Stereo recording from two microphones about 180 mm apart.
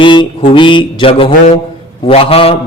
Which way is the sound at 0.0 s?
25° left (ahead or behind).